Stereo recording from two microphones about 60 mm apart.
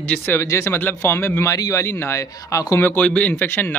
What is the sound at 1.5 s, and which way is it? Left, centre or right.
Speech, left.